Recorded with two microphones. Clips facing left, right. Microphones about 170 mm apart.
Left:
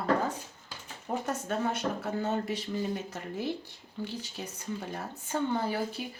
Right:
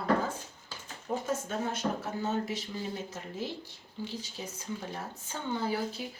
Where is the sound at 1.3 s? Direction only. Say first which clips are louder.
Left 3 dB; 65° left (ahead or behind).